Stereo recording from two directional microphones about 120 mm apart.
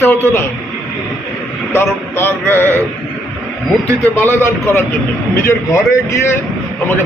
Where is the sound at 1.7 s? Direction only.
20° left (ahead or behind).